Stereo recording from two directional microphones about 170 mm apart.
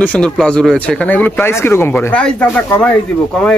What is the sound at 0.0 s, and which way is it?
A man's voice, 5° left (ahead or behind).